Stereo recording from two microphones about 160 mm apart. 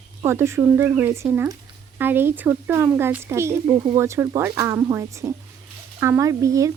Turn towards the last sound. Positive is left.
turn(degrees=-20)  # may be behind; listen again after turning